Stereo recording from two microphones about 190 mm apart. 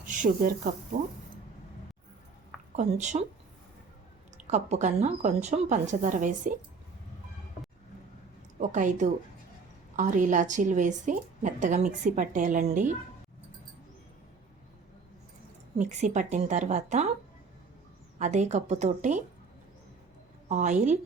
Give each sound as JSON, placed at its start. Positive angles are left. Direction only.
{"t": 0.2, "sound": "speech", "side_deg": -40}
{"t": 2.7, "sound": "a woman's voice", "side_deg": -40}
{"t": 4.5, "sound": "a woman's voice", "side_deg": -40}
{"t": 8.5, "sound": "a woman's voice", "side_deg": -40}
{"t": 15.8, "sound": "a woman's voice", "side_deg": -40}
{"t": 18.2, "sound": "a woman's voice", "side_deg": -40}
{"t": 20.5, "sound": "a woman's voice", "side_deg": -40}